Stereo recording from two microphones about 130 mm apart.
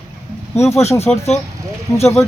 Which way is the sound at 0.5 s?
20° left (ahead or behind).